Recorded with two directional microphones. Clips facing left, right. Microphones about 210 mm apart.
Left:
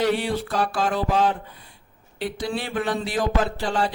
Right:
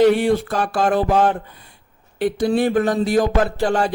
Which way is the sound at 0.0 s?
50° right (ahead or behind).